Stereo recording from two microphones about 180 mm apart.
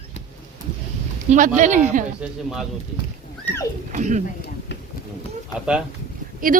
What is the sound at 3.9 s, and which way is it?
Speech, 45° right (ahead or behind).